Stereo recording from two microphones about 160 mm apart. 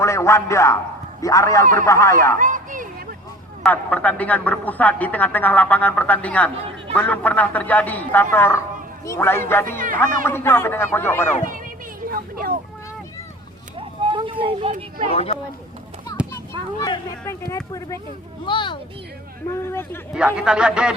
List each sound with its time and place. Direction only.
0.0 s a woman's voice: 15° left (ahead or behind)
2.4 s a sound: 55° right (ahead or behind)
3.6 s a woman's voice: 10° left (ahead or behind)
9.6 s speech: 60° right (ahead or behind)
10.2 s a woman's voice: 15° left (ahead or behind)
12.0 s speech: 65° right (ahead or behind)
13.7 s a sound: 35° right (ahead or behind)
15.1 s speech: 40° left (ahead or behind)
16.8 s speech: 20° left (ahead or behind)
18.4 s speech: 30° left (ahead or behind)
19.5 s a woman's voice: 15° left (ahead or behind)
20.1 s a man's voice: 5° right (ahead or behind)